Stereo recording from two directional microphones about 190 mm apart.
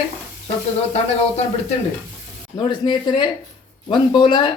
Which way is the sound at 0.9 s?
35° left (ahead or behind).